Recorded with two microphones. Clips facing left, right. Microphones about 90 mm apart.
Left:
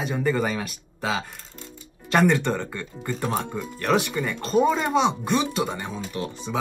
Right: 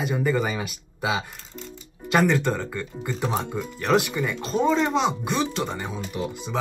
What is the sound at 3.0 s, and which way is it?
Speech, 15° right (ahead or behind).